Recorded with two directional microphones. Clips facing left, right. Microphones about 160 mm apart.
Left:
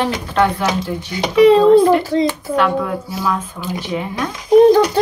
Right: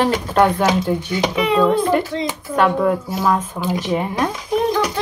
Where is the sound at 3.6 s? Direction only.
35° right (ahead or behind).